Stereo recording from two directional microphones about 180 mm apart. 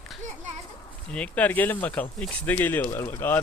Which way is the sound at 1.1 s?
10° left (ahead or behind).